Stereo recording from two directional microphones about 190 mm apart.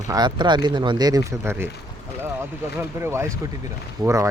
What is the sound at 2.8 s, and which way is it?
Speech, 15° right (ahead or behind).